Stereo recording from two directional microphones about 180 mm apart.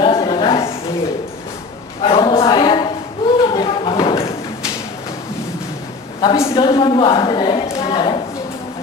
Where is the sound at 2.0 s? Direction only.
25° left (ahead or behind).